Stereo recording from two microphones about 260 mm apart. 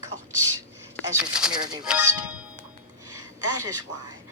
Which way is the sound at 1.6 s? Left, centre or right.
Centre.